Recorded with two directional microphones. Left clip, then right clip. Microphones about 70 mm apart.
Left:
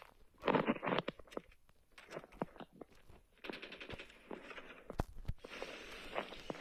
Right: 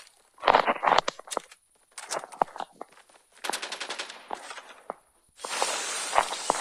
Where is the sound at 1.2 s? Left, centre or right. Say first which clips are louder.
Right 15 dB; right.